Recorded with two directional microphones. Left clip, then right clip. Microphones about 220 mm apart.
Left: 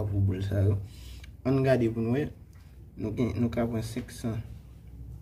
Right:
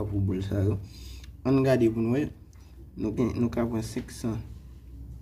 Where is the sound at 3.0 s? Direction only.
15° right (ahead or behind).